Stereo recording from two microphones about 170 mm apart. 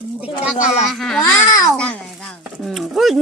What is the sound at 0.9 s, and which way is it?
Speech, centre (ahead or behind).